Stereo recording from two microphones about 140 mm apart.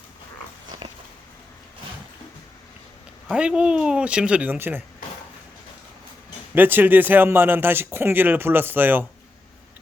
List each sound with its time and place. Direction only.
0.8 s a sound: 35° right (ahead or behind)
3.2 s speech: 5° right (ahead or behind)
6.5 s speech: 15° right (ahead or behind)